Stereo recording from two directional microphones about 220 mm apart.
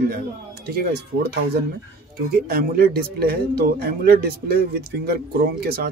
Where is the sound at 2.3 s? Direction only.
45° right (ahead or behind).